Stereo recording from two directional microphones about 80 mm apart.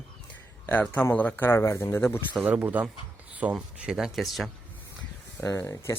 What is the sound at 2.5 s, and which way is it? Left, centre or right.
Speech, right.